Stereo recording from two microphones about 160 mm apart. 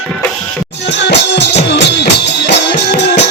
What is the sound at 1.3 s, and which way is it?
Music, 90° left.